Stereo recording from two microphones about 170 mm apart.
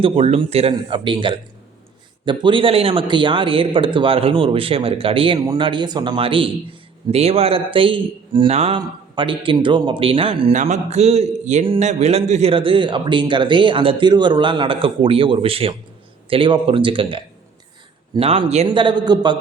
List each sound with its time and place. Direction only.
0.0 s a man's voice: 35° right (ahead or behind)
10.5 s a man's voice: 45° right (ahead or behind); by 19.4 s 25° right (ahead or behind)